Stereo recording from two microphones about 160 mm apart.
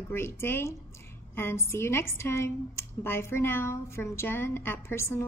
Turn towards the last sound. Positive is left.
turn(degrees=15)  # may be behind; listen again after turning